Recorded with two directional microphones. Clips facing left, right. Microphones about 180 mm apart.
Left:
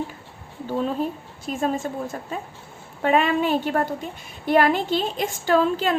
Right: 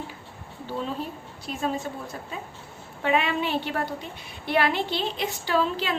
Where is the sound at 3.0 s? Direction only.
45° left (ahead or behind).